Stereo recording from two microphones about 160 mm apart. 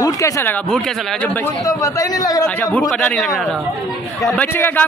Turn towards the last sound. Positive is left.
turn(degrees=10)  # may be behind; listen again after turning